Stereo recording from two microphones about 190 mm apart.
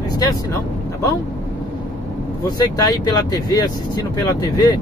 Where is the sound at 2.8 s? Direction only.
20° left (ahead or behind).